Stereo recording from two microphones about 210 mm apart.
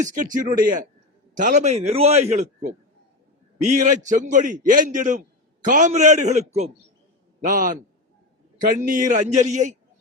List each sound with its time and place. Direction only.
0.0 s a man's voice: 40° right (ahead or behind)
3.8 s a man's voice: 35° right (ahead or behind)